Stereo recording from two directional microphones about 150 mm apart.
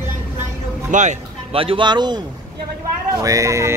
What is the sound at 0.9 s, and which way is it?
Speech, 55° right (ahead or behind).